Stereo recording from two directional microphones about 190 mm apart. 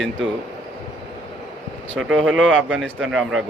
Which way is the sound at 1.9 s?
90° right.